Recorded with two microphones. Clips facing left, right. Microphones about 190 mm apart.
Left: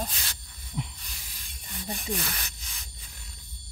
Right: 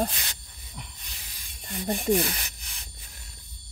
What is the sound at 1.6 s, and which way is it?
Speech, 60° right (ahead or behind).